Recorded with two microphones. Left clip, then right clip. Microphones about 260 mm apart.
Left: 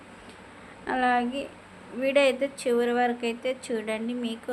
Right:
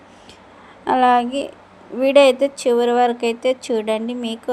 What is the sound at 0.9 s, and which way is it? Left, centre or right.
Speech, right.